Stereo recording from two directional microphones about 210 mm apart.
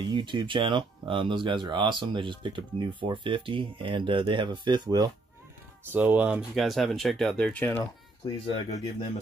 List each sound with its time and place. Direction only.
0.1 s speech: 20° right (ahead or behind); by 7.9 s 10° left (ahead or behind)
8.5 s speech: 30° left (ahead or behind)